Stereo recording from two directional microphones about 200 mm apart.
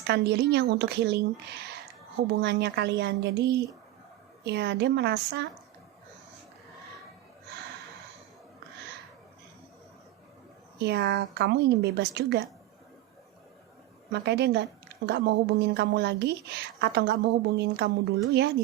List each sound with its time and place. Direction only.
0.1 s a woman's voice: 55° right (ahead or behind)
10.8 s a woman's voice: 55° right (ahead or behind)
14.1 s a woman's voice: 55° right (ahead or behind)